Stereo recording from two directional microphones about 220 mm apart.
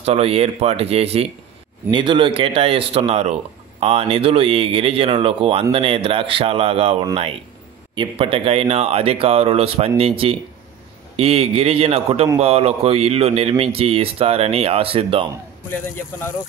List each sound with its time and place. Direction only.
0.0 s speech: 25° right (ahead or behind)
15.7 s speech: 10° left (ahead or behind)